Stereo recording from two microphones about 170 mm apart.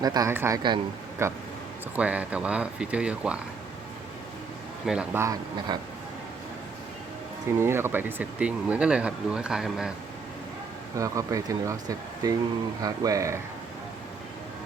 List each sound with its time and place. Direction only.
0.0 s speech: 20° right (ahead or behind); by 3.4 s 5° right (ahead or behind)
4.9 s speech: 10° right (ahead or behind)
7.6 s speech: 15° right (ahead or behind)
10.9 s speech: 20° right (ahead or behind)